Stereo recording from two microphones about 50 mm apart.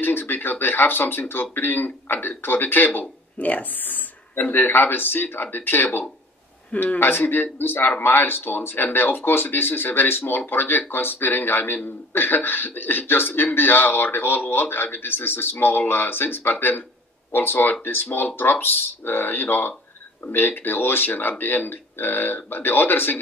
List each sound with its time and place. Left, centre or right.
0.0 s a man's voice: left